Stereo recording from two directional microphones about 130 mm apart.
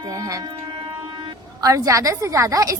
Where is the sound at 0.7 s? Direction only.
40° right (ahead or behind).